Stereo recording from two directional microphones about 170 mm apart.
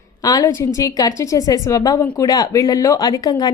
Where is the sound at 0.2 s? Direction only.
20° left (ahead or behind).